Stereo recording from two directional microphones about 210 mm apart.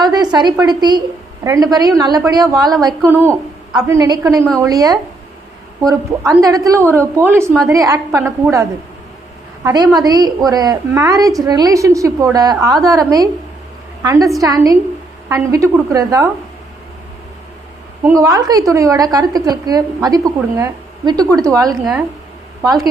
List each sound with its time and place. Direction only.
0.0 s a woman's voice: 20° right (ahead or behind)
9.6 s a woman's voice: 20° right (ahead or behind)
18.0 s a woman's voice: 15° right (ahead or behind)